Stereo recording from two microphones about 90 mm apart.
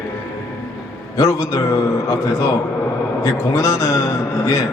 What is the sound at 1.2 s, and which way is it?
Speech, 35° left (ahead or behind).